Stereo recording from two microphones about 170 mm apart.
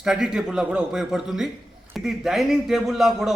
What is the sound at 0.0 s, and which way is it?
A man's voice, 5° right (ahead or behind).